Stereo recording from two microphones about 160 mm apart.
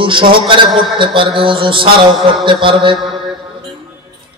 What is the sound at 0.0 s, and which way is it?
A man's voice, 30° right (ahead or behind).